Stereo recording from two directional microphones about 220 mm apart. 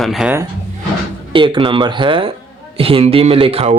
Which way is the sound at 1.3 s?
20° right (ahead or behind).